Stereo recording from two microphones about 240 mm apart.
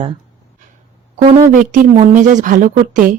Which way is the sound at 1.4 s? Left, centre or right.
Right.